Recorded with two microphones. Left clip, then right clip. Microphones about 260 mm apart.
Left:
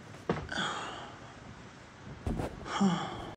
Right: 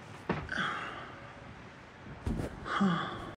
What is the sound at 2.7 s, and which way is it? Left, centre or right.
Gasp, left.